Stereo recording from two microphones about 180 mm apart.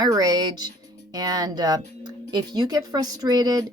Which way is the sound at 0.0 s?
20° right (ahead or behind).